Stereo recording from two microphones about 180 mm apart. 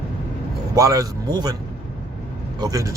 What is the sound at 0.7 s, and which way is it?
Speech, 20° right (ahead or behind).